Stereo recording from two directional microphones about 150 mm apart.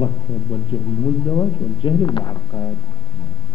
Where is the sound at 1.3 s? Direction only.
30° left (ahead or behind).